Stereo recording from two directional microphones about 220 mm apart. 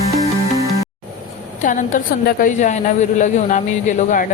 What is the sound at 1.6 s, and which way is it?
A woman's voice, 35° left (ahead or behind).